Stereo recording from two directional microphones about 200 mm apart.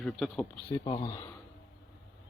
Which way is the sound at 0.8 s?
20° left (ahead or behind).